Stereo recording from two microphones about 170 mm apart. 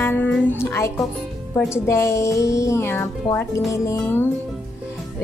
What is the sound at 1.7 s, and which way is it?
Speech, 15° left (ahead or behind).